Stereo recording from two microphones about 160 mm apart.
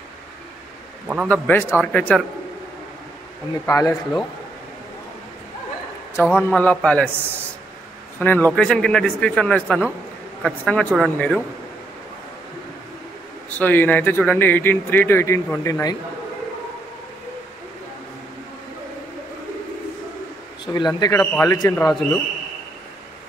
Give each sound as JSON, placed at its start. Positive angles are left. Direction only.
{"t": 1.0, "sound": "a man's voice", "side_deg": -10}
{"t": 1.3, "sound": "speech", "side_deg": 15}
{"t": 3.6, "sound": "a man's voice", "side_deg": 20}
{"t": 6.3, "sound": "speech", "side_deg": 10}
{"t": 8.2, "sound": "speech", "side_deg": 10}
{"t": 13.5, "sound": "speech", "side_deg": 10}
{"t": 20.6, "sound": "a man's voice", "side_deg": 25}
{"t": 21.2, "sound": "speech", "side_deg": 5}
{"t": 21.5, "sound": "a man's voice", "side_deg": 20}